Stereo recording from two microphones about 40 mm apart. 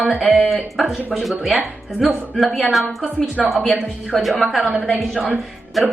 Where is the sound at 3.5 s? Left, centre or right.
Centre.